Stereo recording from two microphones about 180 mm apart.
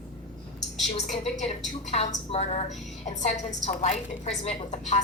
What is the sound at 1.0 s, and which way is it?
A woman's voice, 40° left (ahead or behind).